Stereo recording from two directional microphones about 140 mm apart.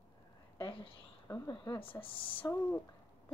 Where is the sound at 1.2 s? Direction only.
25° left (ahead or behind).